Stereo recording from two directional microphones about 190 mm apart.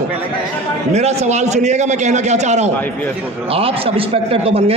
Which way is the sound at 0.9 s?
35° right (ahead or behind).